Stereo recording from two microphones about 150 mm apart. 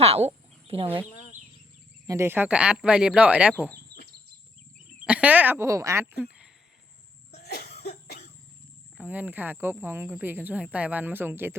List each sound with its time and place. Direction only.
0.0 s speech: 40° right (ahead or behind)
2.0 s speech: 15° right (ahead or behind)
5.0 s speech: 10° right (ahead or behind)
7.3 s cough: 90° left
9.0 s speech: 10° right (ahead or behind)